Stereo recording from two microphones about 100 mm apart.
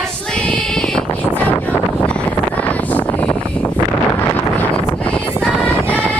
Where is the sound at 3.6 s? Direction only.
15° left (ahead or behind).